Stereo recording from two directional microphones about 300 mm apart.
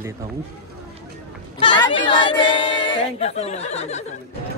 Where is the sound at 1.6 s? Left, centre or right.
Centre.